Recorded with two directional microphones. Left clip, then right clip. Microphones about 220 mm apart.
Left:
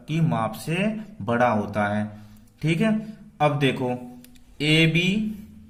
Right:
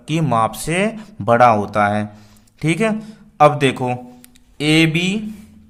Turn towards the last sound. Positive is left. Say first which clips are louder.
# right 5 dB
turn(degrees=-35)  # may be behind; listen again after turning